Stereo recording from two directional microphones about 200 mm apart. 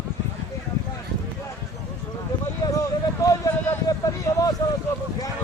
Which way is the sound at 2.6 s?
15° left (ahead or behind).